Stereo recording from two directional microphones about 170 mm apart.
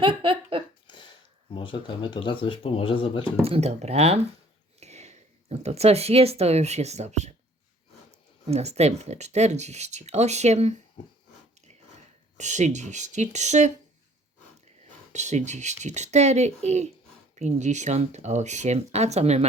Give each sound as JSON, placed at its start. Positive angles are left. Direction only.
{"t": 0.0, "sound": "a sound", "side_deg": -30}
{"t": 1.5, "sound": "speech", "side_deg": 30}
{"t": 3.4, "sound": "speech", "side_deg": -35}
{"t": 8.4, "sound": "speech", "side_deg": -40}
{"t": 12.4, "sound": "speech", "side_deg": -45}
{"t": 15.1, "sound": "speech", "side_deg": -45}